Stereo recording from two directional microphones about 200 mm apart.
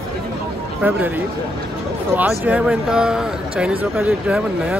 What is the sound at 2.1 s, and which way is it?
A man's voice, 10° right (ahead or behind).